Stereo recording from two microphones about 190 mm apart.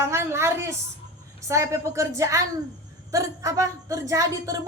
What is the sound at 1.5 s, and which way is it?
A woman's voice, 15° right (ahead or behind).